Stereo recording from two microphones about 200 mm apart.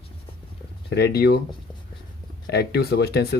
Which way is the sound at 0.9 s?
55° left (ahead or behind).